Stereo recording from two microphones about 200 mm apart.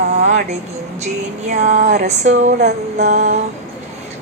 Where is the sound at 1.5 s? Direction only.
35° right (ahead or behind).